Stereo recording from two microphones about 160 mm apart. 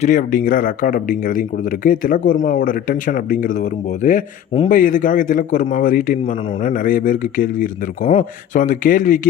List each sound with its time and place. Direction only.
0.0 s a man's voice: 55° left (ahead or behind)